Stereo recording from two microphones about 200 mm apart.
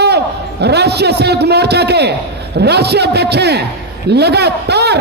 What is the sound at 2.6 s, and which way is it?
A man's voice, 55° right (ahead or behind).